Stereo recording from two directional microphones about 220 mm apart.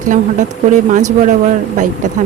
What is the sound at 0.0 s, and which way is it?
Speech, 35° right (ahead or behind).